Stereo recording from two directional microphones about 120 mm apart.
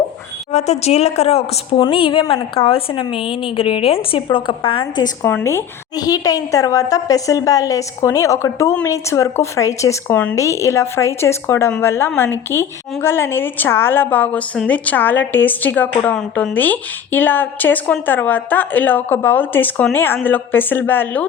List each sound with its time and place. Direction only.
0.5 s a woman's voice: 65° left (ahead or behind)
1.8 s a woman's voice: 45° left (ahead or behind)
5.2 s a woman's voice: 20° left (ahead or behind)